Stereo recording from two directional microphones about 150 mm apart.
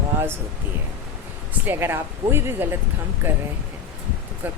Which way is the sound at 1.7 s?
15° right (ahead or behind).